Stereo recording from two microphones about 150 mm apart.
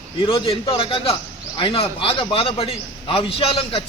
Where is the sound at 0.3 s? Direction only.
35° left (ahead or behind).